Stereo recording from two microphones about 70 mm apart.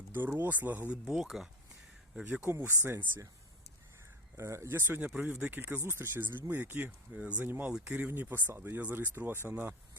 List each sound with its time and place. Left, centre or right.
0.1 s speech: right
1.0 s speech: centre
2.2 s speech: right
4.4 s speech: right
4.9 s speech: right
5.5 s speech: right